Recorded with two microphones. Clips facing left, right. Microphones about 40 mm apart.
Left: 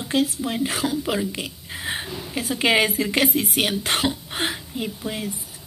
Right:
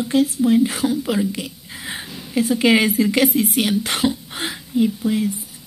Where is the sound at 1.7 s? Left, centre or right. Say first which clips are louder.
Left 1 dB; left.